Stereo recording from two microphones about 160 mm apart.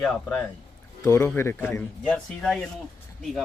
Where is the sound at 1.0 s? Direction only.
20° left (ahead or behind).